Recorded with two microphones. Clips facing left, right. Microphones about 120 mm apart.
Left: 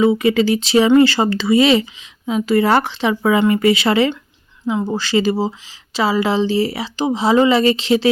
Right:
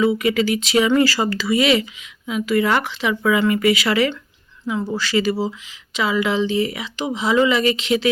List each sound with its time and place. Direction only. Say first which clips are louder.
0.0 s speech: left 4 dB; 30° left (ahead or behind)